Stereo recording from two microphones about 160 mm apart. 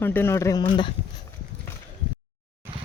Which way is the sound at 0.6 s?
30° left (ahead or behind).